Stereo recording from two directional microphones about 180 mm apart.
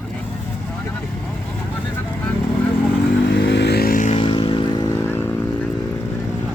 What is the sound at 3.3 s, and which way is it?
Vehicle, 70° left (ahead or behind).